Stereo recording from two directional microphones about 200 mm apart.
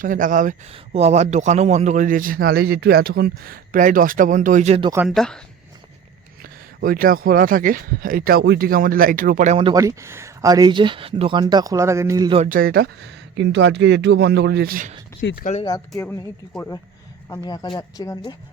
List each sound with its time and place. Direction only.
0.0 s a man's voice: 40° right (ahead or behind)
5.0 s speech: centre (ahead or behind)
6.4 s speech: 45° right (ahead or behind)
9.7 s speech: 15° right (ahead or behind)
12.4 s speech: 45° right (ahead or behind)
15.2 s speech: 70° left (ahead or behind)
16.6 s speech: 10° left (ahead or behind)